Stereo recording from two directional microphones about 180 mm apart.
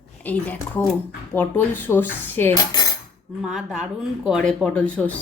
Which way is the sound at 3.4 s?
Centre (ahead or behind).